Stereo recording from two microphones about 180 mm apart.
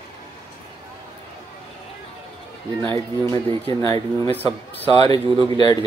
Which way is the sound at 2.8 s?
20° left (ahead or behind).